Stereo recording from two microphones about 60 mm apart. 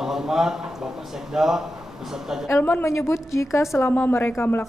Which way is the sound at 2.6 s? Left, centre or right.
Left.